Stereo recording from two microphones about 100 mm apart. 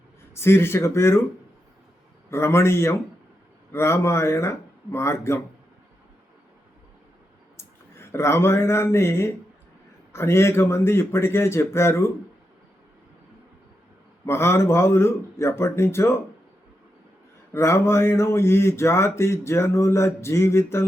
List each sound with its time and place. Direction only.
0.3 s speech: 25° left (ahead or behind)
2.3 s speech: 25° left (ahead or behind)
7.5 s speech: 25° left (ahead or behind)
14.3 s speech: 25° left (ahead or behind)
17.5 s speech: 25° left (ahead or behind)